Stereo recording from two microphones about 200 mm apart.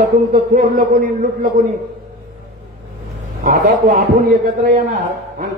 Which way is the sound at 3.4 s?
45° right (ahead or behind).